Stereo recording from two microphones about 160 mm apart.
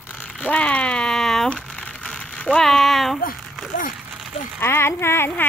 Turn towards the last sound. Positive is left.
turn(degrees=15)  # may be behind; listen again after turning